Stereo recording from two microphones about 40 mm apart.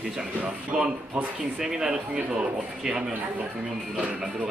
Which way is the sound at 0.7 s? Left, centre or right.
Centre.